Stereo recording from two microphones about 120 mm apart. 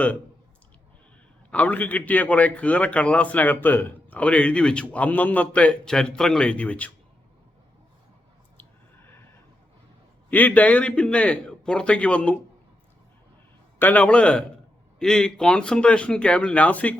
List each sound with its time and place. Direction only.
1.5 s a man's voice: 10° left (ahead or behind)
8.5 s squish: 20° left (ahead or behind)
10.2 s a man's voice: 15° left (ahead or behind)
13.7 s a man's voice: 15° left (ahead or behind)